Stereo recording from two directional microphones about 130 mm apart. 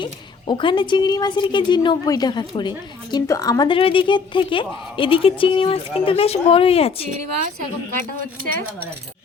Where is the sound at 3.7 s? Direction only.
45° left (ahead or behind).